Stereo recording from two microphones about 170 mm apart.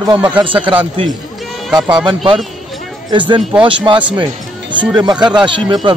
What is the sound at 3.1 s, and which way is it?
A man's voice, 30° right (ahead or behind).